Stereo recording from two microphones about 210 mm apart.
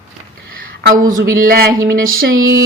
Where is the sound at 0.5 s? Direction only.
45° right (ahead or behind).